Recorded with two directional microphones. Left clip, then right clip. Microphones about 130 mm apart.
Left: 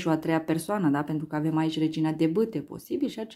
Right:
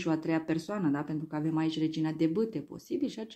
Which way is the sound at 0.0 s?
40° left (ahead or behind).